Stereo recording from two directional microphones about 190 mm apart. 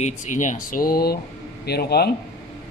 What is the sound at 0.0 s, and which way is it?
A man's voice, 40° left (ahead or behind).